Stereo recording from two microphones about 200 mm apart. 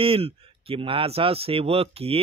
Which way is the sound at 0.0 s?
25° right (ahead or behind).